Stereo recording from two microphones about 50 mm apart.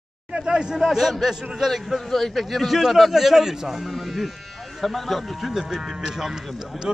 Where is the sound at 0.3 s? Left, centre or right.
Centre.